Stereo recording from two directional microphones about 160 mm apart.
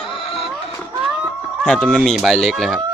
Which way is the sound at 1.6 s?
5° left (ahead or behind).